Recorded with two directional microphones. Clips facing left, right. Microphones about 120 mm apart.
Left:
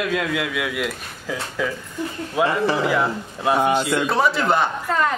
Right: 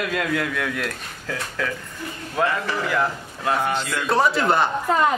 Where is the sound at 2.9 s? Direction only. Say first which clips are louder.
Left 2 dB; 5° left (ahead or behind).